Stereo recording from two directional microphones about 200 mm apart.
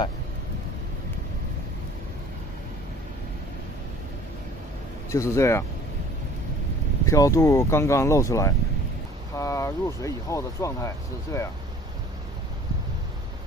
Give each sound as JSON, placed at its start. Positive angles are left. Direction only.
{"t": 5.1, "sound": "speech", "side_deg": 15}
{"t": 7.1, "sound": "speech", "side_deg": 15}